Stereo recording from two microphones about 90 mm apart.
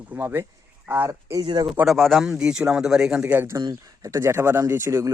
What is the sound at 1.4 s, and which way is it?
Speech, 75° right (ahead or behind).